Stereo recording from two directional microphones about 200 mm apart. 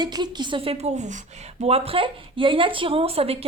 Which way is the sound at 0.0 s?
20° right (ahead or behind).